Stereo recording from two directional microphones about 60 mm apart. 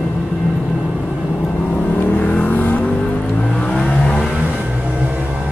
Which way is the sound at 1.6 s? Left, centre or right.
Left.